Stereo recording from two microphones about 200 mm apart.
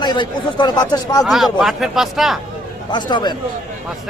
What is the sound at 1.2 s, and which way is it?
A man's voice, centre (ahead or behind).